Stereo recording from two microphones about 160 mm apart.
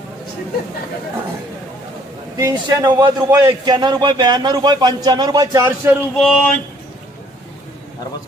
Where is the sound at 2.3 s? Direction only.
20° right (ahead or behind).